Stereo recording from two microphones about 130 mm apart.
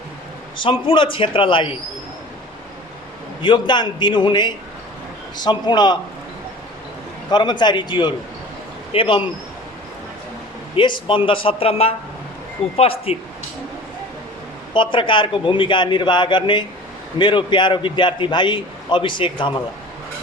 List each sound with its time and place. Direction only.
0.5 s a man's voice: 40° left (ahead or behind)
3.4 s a man's voice: 40° left (ahead or behind)
7.3 s a man's voice: 35° left (ahead or behind)
11.0 s speech: 40° left (ahead or behind)
14.7 s a man's voice: 40° left (ahead or behind)